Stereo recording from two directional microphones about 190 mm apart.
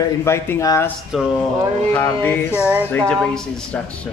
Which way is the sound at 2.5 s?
5° right (ahead or behind).